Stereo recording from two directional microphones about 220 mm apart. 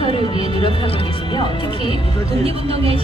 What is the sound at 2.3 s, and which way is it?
Speech, 25° right (ahead or behind).